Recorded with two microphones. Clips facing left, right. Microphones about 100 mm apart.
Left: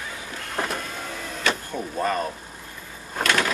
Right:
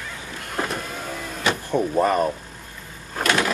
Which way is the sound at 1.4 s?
20° right (ahead or behind).